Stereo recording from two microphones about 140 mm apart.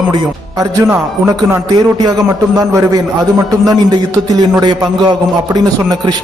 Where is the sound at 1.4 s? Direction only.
15° right (ahead or behind).